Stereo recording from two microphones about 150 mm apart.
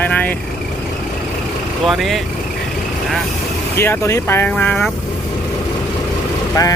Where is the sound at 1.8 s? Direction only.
Centre (ahead or behind).